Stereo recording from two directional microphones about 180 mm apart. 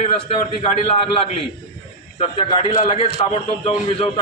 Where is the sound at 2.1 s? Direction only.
30° left (ahead or behind).